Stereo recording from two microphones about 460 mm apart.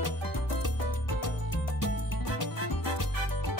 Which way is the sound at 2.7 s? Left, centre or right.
Left.